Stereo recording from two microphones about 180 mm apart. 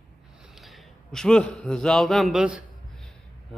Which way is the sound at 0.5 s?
Centre (ahead or behind).